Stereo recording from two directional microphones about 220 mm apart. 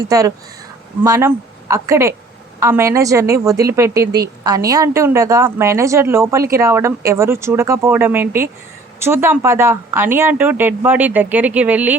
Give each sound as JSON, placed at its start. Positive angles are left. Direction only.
{"t": 0.1, "sound": "a woman's voice", "side_deg": -15}